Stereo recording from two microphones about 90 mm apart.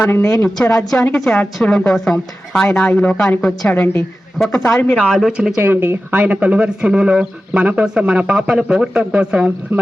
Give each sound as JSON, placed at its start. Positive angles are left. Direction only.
{"t": 0.0, "sound": "a woman's voice", "side_deg": 25}
{"t": 5.6, "sound": "speech", "side_deg": -25}